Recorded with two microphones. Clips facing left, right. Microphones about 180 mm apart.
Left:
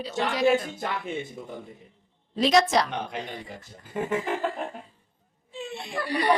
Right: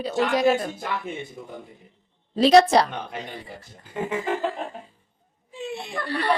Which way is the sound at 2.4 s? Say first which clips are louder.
Right 6 dB; 35° right (ahead or behind).